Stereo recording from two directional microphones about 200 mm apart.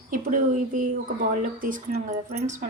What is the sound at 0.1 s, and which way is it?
Speech, 40° right (ahead or behind).